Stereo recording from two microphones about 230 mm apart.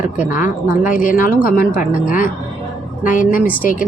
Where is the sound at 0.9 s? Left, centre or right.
Left.